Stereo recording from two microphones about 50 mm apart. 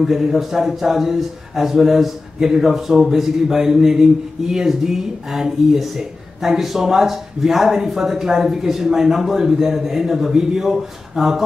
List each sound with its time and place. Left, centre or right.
0.0 s a man's voice: centre